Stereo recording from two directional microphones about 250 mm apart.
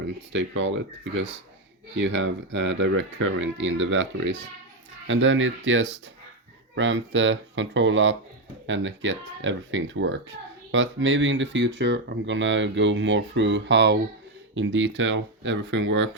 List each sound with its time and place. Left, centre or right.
0.3 s speech: right
2.0 s speech: right